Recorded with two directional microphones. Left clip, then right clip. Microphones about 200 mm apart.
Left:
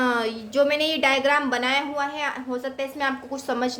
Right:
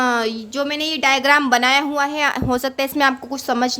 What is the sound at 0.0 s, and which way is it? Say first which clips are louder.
A woman's voice: right 5 dB; 20° right (ahead or behind).